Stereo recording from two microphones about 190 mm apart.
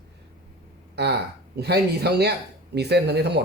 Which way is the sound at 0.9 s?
60° right (ahead or behind).